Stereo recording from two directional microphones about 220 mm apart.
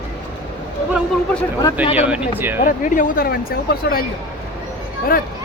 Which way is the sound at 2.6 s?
35° left (ahead or behind).